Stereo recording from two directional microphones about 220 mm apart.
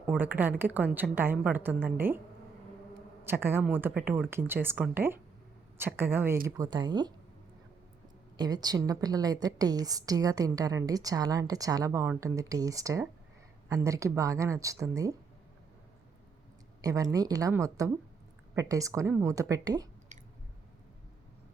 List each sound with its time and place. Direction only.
0.1 s a woman's voice: 10° right (ahead or behind)
3.2 s a woman's voice: 10° right (ahead or behind)
8.4 s a woman's voice: 20° right (ahead or behind)
16.8 s a woman's voice: 15° right (ahead or behind)
20.1 s chewing: 35° right (ahead or behind)